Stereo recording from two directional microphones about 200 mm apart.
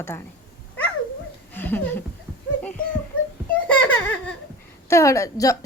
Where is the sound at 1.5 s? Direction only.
10° left (ahead or behind).